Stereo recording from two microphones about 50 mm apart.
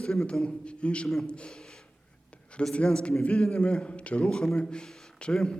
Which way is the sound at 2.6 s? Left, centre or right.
Centre.